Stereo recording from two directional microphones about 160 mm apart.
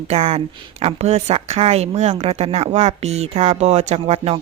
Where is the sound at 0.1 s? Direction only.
40° right (ahead or behind).